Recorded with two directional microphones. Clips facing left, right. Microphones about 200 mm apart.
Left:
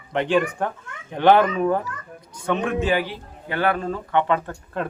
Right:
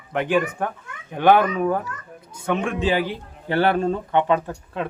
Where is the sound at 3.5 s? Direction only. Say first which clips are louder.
Right 4 dB; 30° right (ahead or behind).